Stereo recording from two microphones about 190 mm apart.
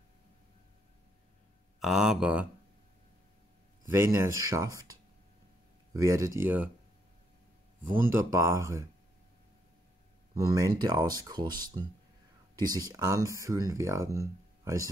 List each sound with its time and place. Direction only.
1.8 s speech: centre (ahead or behind)
3.9 s speech: 15° right (ahead or behind)
5.9 s speech: 15° right (ahead or behind)
7.8 s speech: 10° right (ahead or behind)
10.3 s speech: 15° right (ahead or behind)